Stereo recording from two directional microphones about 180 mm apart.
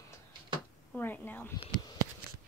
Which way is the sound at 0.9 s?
10° left (ahead or behind).